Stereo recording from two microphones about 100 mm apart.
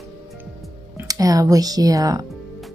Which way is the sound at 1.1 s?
35° right (ahead or behind).